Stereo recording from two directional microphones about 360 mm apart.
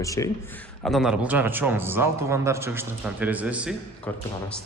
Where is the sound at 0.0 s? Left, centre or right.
Centre.